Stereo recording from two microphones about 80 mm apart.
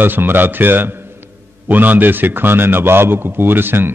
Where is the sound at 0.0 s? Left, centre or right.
Right.